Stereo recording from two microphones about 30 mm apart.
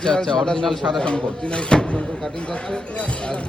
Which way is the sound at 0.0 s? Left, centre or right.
Left.